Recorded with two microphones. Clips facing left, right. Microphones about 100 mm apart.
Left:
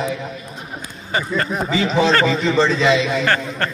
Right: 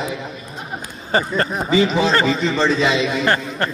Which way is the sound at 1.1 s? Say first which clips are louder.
Right 2 dB; 35° right (ahead or behind).